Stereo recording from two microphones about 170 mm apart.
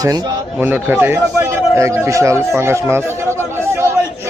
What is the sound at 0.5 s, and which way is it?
Speech, 10° right (ahead or behind).